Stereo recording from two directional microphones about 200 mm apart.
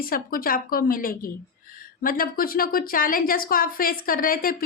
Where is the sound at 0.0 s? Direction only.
45° left (ahead or behind).